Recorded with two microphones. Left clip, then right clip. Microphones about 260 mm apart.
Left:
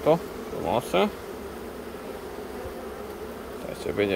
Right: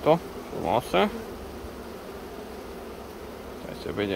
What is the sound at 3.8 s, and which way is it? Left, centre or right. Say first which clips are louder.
Speech: left 4 dB; centre.